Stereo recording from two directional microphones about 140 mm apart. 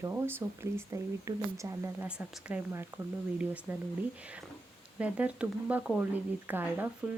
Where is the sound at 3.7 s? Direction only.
15° right (ahead or behind).